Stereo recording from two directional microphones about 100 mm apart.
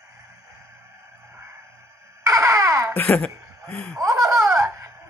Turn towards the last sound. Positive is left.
turn(degrees=-30)  # may be behind; listen again after turning